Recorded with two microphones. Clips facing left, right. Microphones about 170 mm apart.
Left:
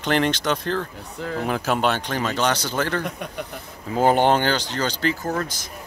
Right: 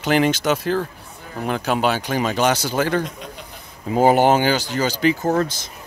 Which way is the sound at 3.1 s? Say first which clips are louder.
Left 5 dB; 60° left (ahead or behind).